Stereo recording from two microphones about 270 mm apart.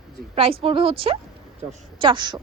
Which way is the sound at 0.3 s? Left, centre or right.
Right.